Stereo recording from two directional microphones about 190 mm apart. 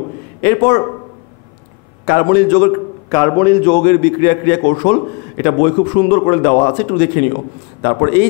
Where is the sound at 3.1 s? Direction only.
15° left (ahead or behind); by 7.0 s 35° left (ahead or behind).